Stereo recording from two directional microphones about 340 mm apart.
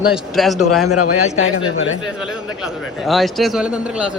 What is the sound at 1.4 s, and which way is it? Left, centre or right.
Speech, left.